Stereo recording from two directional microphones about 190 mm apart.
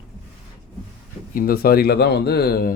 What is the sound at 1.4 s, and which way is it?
Speech, 50° left (ahead or behind).